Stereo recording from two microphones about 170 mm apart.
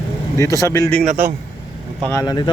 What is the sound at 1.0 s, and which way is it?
Speech, 60° right (ahead or behind).